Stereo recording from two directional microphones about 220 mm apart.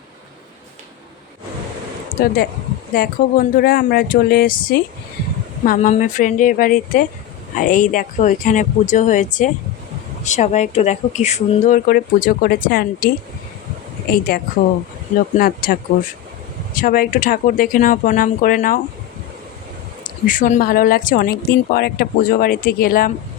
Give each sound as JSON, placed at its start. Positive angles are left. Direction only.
{"t": 2.9, "sound": "speech", "side_deg": 45}
{"t": 14.1, "sound": "speech", "side_deg": 40}
{"t": 20.2, "sound": "speech", "side_deg": 35}